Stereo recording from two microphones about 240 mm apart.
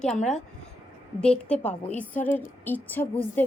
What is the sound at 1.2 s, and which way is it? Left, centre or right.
Speech, centre.